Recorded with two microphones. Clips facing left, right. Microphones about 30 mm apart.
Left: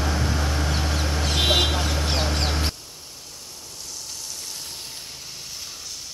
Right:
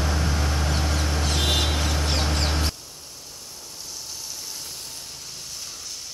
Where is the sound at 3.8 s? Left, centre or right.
Centre.